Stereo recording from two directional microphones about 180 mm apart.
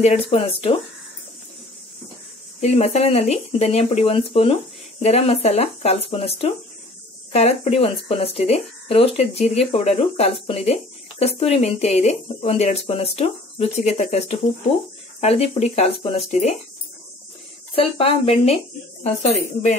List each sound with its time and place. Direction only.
0.0 s speech: 35° left (ahead or behind)
2.6 s speech: 35° left (ahead or behind)
17.7 s speech: 30° left (ahead or behind)